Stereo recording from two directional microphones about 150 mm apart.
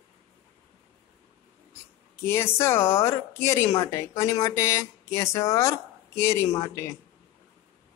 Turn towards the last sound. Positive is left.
turn(degrees=20)  # may be behind; listen again after turning